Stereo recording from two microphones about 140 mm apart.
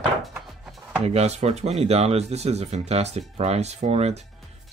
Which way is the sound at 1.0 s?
50° right (ahead or behind).